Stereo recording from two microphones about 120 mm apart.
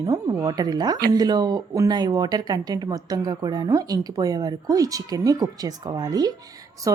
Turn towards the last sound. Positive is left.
turn(degrees=-30)  # may be behind; listen again after turning